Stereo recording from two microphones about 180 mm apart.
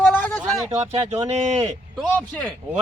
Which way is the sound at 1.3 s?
40° right (ahead or behind).